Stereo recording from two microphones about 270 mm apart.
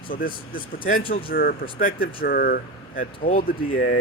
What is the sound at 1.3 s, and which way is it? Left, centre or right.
Speech, left.